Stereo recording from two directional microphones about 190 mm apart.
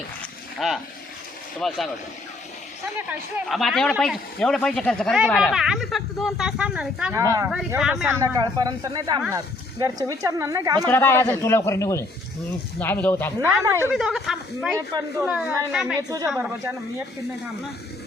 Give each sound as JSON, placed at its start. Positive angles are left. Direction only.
{"t": 0.6, "sound": "a man's voice", "side_deg": 0}
{"t": 3.1, "sound": "a man's voice", "side_deg": -5}
{"t": 8.2, "sound": "speech", "side_deg": -20}
{"t": 10.8, "sound": "a man's voice", "side_deg": 10}
{"t": 13.9, "sound": "a man's voice", "side_deg": -5}
{"t": 16.0, "sound": "speech", "side_deg": -20}
{"t": 16.3, "sound": "speech", "side_deg": -5}